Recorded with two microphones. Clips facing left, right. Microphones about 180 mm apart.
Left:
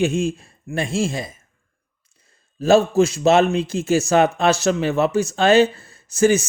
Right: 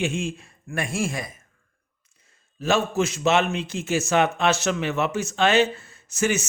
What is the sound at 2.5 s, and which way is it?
Speech, 35° left (ahead or behind).